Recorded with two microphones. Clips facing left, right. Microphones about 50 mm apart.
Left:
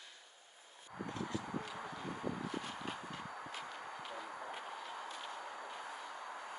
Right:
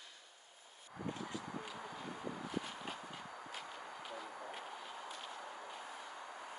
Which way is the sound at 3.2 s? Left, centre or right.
Left.